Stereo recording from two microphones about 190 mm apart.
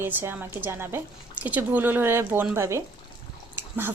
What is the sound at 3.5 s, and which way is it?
Dog, 10° right (ahead or behind).